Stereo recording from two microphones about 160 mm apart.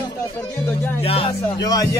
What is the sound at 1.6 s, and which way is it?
Speech, 20° left (ahead or behind).